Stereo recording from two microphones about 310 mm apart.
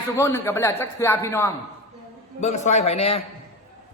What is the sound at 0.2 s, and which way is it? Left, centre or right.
A man's voice, centre.